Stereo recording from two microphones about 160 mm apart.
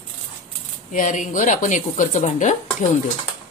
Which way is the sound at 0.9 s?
50° left (ahead or behind).